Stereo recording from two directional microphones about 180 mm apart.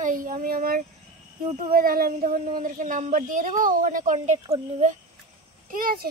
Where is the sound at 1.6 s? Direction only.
55° right (ahead or behind); by 4.9 s 35° right (ahead or behind).